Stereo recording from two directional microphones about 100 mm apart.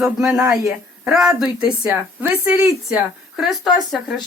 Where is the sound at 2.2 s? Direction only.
20° right (ahead or behind).